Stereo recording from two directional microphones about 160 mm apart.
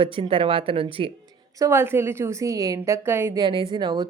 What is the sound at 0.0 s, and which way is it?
Speech, 35° right (ahead or behind).